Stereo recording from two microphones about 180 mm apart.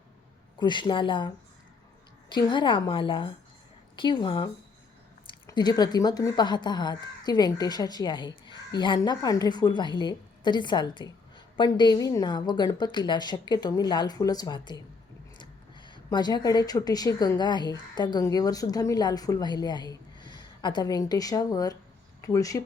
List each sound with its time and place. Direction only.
0.6 s a woman's voice: 25° left (ahead or behind)
2.3 s a woman's voice: 25° left (ahead or behind)